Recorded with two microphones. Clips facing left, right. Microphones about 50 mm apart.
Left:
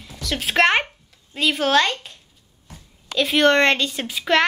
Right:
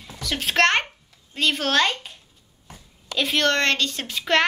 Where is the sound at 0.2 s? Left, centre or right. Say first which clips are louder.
Left 2 dB; centre.